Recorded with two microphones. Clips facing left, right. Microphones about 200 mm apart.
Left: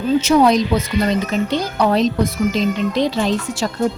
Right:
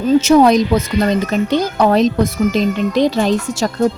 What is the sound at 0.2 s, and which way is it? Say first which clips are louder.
Speech: right 3 dB; 45° right (ahead or behind).